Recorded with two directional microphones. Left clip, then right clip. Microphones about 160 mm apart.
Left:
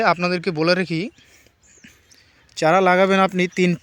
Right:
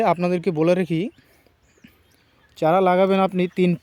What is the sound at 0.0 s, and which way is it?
Speech, 25° right (ahead or behind).